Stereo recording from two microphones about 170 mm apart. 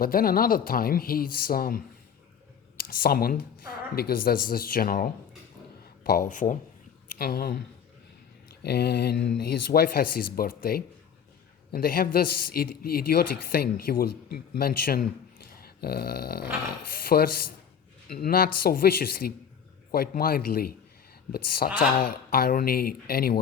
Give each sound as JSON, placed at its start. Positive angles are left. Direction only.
{"t": 0.0, "sound": "speech", "side_deg": 60}
{"t": 2.8, "sound": "speech", "side_deg": 60}
{"t": 7.2, "sound": "speech", "side_deg": 60}
{"t": 8.6, "sound": "speech", "side_deg": 70}
{"t": 9.4, "sound": "speech", "side_deg": 60}
{"t": 15.6, "sound": "dog", "side_deg": 65}
{"t": 16.9, "sound": "speech", "side_deg": 60}